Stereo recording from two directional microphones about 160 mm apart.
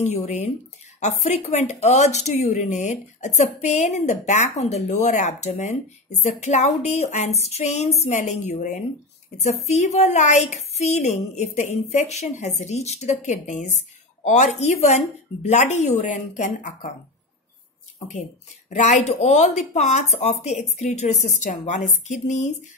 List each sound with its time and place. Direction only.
0.0 s speech: 45° left (ahead or behind)
18.7 s speech: 45° left (ahead or behind)